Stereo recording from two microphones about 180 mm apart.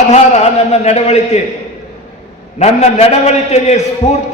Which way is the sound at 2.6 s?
35° left (ahead or behind).